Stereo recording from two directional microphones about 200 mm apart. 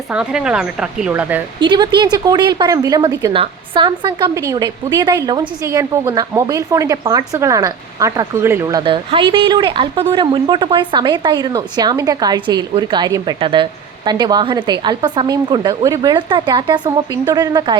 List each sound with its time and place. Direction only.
0.1 s speech: 5° right (ahead or behind)
1.5 s a woman's voice: 20° right (ahead or behind)
3.3 s a woman's voice: 25° right (ahead or behind)